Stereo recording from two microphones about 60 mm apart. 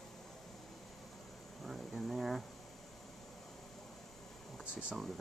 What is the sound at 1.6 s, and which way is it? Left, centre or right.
Speech, centre.